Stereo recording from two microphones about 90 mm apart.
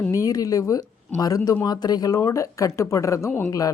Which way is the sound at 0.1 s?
40° left (ahead or behind).